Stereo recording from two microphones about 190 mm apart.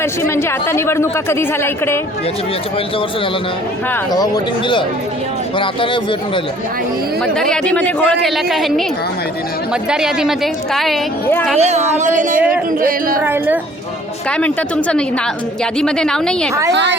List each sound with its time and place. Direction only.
0.0 s speech: 15° left (ahead or behind)
5.5 s speech: 25° left (ahead or behind)
7.3 s speech: 5° left (ahead or behind)
9.9 s speech: 5° right (ahead or behind)
11.5 s a woman's voice: 35° right (ahead or behind)
13.2 s a woman's voice: 10° right (ahead or behind)
14.3 s speech: 5° left (ahead or behind)
16.7 s a woman's voice: 65° right (ahead or behind)